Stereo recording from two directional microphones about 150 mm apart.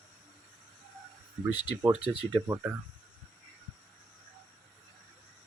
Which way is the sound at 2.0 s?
5° right (ahead or behind).